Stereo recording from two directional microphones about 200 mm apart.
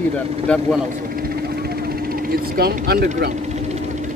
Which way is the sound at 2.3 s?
50° right (ahead or behind).